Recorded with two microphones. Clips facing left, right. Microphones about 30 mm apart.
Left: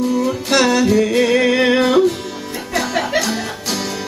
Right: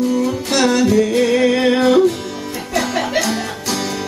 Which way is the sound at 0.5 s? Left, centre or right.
Left.